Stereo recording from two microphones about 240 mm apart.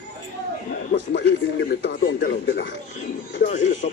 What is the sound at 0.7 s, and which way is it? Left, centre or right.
Speech, left.